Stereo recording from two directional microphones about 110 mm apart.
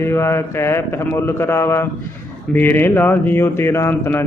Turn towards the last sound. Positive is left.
turn(degrees=20)  # may be behind; listen again after turning